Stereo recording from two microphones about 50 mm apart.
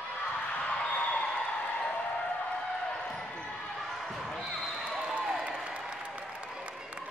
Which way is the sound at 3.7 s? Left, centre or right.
Centre.